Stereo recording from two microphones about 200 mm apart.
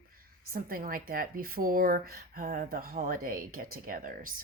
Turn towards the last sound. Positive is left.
turn(degrees=-45)  # may be behind; listen again after turning